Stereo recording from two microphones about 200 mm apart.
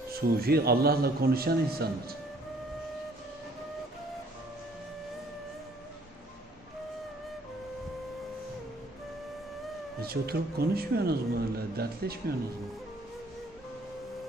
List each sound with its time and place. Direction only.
0.2 s a man's voice: 50° right (ahead or behind)
10.0 s a man's voice: 50° right (ahead or behind)